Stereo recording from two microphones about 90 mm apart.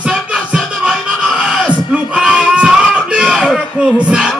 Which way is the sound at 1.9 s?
10° right (ahead or behind).